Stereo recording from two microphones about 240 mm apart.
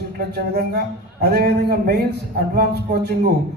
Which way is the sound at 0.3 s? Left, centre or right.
Right.